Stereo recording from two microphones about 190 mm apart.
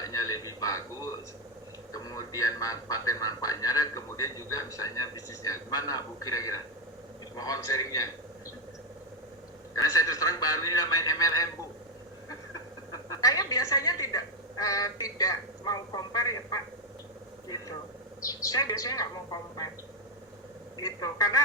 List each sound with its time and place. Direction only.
0.0 s a sound: 20° left (ahead or behind)
1.9 s a man's voice: 20° left (ahead or behind)
9.7 s a man's voice: 20° left (ahead or behind)
13.1 s speech: 20° left (ahead or behind)
18.4 s a man's voice: 20° left (ahead or behind)
20.7 s a man's voice: 20° left (ahead or behind)